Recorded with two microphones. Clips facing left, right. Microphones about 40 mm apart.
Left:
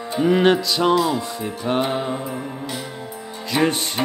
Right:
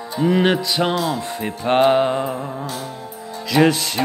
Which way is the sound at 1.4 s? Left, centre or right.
Right.